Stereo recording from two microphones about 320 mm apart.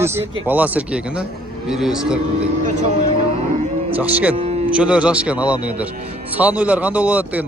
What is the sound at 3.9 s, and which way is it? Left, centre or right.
Speech, centre.